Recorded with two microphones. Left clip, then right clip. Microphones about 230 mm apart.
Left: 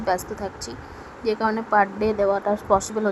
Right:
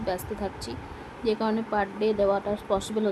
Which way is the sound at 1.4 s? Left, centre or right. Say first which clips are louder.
Left 7 dB; centre.